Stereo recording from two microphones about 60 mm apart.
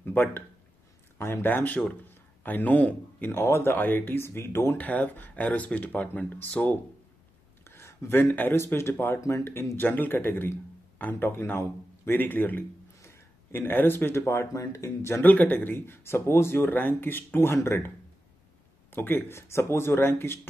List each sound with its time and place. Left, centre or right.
0.0 s a sound: left
1.1 s speech: left
3.3 s speech: left
4.7 s speech: left
7.6 s speech: left
9.8 s speech: left
13.0 s a sound: left
14.1 s speech: left
15.2 s speech: left